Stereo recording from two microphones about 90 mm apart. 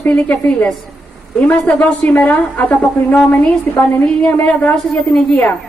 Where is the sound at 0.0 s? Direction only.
20° left (ahead or behind).